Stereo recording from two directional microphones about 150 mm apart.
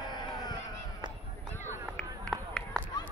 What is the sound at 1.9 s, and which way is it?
Run, 5° left (ahead or behind).